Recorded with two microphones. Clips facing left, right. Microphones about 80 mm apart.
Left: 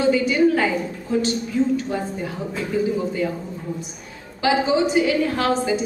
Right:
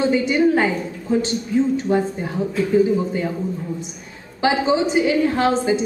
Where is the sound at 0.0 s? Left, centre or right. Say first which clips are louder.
Even; right.